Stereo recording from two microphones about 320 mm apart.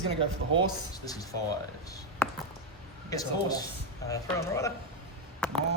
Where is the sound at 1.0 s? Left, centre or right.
Centre.